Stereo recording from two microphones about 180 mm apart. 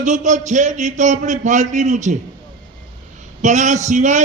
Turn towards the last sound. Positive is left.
turn(degrees=-40)  # may be behind; listen again after turning